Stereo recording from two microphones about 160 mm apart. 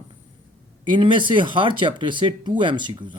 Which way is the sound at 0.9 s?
30° right (ahead or behind).